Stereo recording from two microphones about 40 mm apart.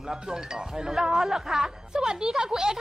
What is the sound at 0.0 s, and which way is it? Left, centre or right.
Speech, centre.